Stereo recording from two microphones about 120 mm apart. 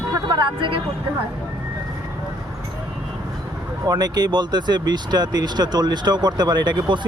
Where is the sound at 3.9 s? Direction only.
35° right (ahead or behind).